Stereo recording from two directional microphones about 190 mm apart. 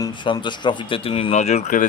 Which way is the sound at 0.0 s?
25° left (ahead or behind).